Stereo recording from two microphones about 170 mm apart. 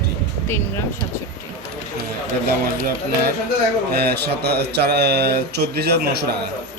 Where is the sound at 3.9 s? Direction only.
70° right (ahead or behind).